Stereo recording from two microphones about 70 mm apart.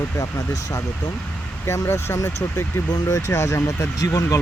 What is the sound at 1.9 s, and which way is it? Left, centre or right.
Speech, left.